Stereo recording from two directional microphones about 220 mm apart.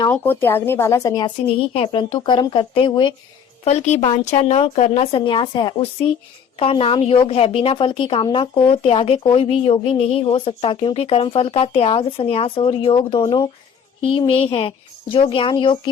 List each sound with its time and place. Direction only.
0.0 s a woman's voice: 10° left (ahead or behind)